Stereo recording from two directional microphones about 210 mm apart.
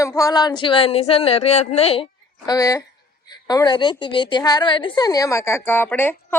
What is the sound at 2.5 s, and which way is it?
A woman's voice, 15° left (ahead or behind).